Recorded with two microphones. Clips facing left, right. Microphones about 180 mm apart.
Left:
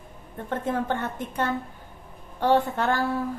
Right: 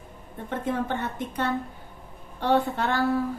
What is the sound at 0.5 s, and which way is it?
A woman's voice, 50° left (ahead or behind).